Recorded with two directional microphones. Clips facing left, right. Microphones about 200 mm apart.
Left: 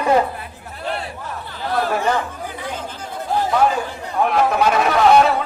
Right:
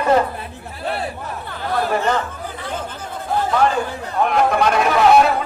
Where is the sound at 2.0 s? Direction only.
10° left (ahead or behind).